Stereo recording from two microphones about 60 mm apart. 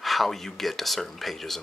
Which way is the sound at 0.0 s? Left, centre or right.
Centre.